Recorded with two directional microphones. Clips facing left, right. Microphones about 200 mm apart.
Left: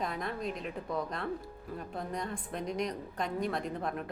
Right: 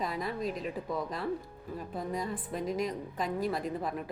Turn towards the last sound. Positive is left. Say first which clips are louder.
# right 1 dB
turn(degrees=0)  # may be behind; listen again after turning